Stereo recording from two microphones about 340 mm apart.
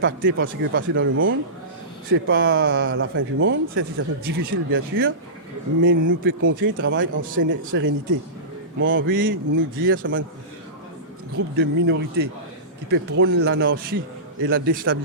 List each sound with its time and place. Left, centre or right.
0.0 s speech: right
11.5 s speech: right